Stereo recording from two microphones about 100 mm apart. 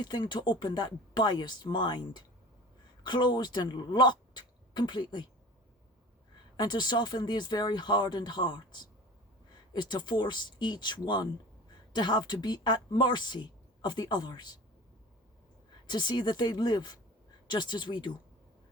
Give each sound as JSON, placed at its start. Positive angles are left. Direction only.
{"t": 0.0, "sound": "speech", "side_deg": 45}
{"t": 6.6, "sound": "speech", "side_deg": 45}
{"t": 15.9, "sound": "speech", "side_deg": 50}